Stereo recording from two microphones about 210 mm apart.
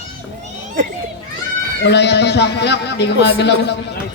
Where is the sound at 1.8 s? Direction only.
55° left (ahead or behind).